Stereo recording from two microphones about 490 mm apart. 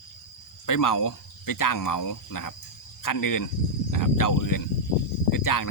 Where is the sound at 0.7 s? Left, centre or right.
Left.